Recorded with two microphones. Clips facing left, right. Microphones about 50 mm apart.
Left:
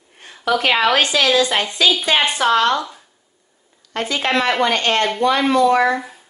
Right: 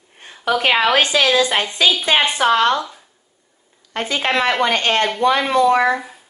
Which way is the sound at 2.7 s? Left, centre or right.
Centre.